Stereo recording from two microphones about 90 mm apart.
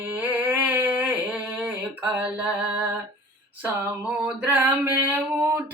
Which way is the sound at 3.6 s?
20° right (ahead or behind).